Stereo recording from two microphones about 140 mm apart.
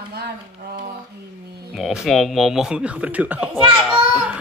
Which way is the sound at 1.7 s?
Centre (ahead or behind).